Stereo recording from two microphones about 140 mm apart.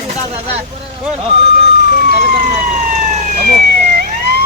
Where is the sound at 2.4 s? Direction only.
65° right (ahead or behind).